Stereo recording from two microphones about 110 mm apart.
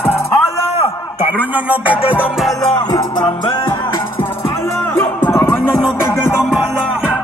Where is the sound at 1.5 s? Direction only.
15° right (ahead or behind).